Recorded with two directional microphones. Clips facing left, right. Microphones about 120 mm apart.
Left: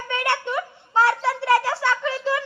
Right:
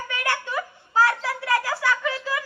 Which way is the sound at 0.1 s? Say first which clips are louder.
Left 4 dB; 25° left (ahead or behind).